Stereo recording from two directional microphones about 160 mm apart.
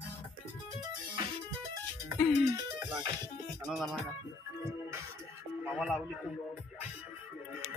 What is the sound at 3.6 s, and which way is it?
Speech, centre (ahead or behind).